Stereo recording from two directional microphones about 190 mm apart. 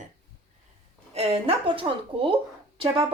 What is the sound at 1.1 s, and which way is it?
Speech, 30° right (ahead or behind).